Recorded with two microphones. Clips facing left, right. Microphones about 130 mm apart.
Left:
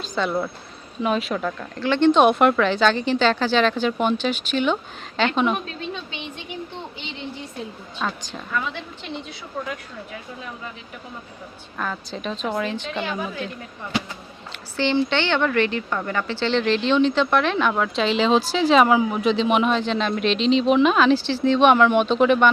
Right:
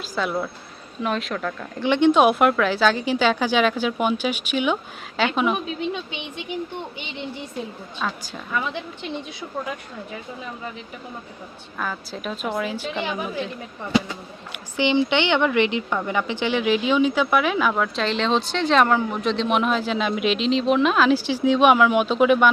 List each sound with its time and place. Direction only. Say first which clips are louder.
0.0 s speech: left 1 dB; 5° right (ahead or behind)
1.8 s speech: even; 15° right (ahead or behind)
8.2 s speech: even; 10° right (ahead or behind)
11.8 s speech: left 1 dB; 5° right (ahead or behind)
14.5 s speech: right 1 dB; 15° right (ahead or behind)